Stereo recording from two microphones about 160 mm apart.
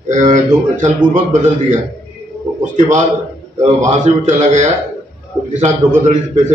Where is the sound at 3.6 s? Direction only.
45° right (ahead or behind).